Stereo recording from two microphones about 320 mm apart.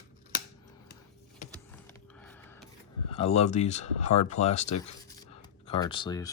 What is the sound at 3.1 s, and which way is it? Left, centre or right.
Speech, centre.